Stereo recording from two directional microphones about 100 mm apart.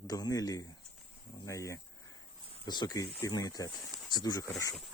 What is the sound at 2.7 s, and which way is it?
Speech, 45° left (ahead or behind).